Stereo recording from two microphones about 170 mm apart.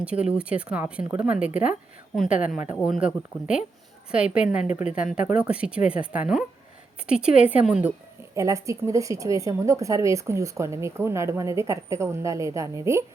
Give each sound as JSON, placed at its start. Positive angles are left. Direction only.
{"t": 0.0, "sound": "speech", "side_deg": -5}